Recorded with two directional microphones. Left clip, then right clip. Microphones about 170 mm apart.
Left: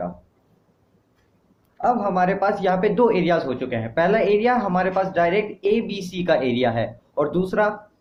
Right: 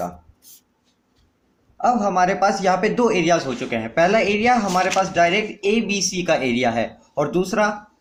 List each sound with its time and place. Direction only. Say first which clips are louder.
1.8 s speech: right 2 dB; 35° right (ahead or behind)